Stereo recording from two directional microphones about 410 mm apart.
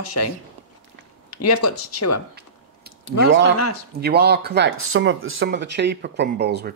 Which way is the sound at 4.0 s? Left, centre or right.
Right.